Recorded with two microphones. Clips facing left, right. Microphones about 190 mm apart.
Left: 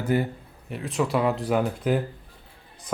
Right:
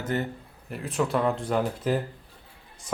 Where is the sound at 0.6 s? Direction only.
Centre (ahead or behind).